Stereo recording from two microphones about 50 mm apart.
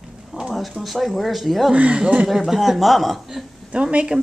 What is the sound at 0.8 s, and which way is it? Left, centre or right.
Speech, centre.